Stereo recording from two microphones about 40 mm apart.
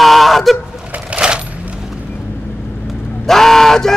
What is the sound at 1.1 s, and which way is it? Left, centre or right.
Coin, right.